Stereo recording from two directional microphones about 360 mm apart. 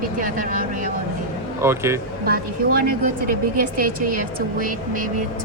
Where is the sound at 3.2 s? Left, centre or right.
Right.